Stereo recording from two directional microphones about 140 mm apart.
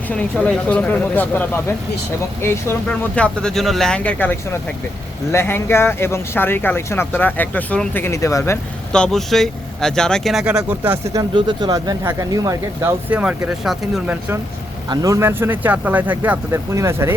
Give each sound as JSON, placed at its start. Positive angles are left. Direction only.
{"t": 0.1, "sound": "speech", "side_deg": 10}
{"t": 8.9, "sound": "speech", "side_deg": 5}
{"t": 10.7, "sound": "speech", "side_deg": -15}
{"t": 11.3, "sound": "speech", "side_deg": -30}
{"t": 13.1, "sound": "speech", "side_deg": -10}
{"t": 14.8, "sound": "speech", "side_deg": -25}